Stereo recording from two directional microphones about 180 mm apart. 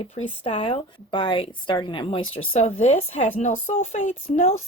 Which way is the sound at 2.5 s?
40° left (ahead or behind).